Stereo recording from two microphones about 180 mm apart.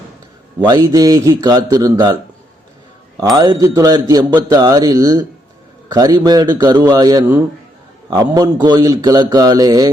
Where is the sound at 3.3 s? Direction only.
20° right (ahead or behind).